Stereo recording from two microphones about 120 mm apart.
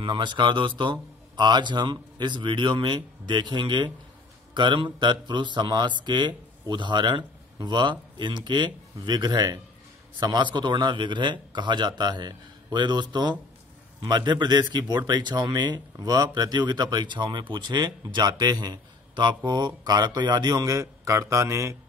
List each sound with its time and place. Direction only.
0.0 s speech: 40° right (ahead or behind); by 21.7 s 25° right (ahead or behind)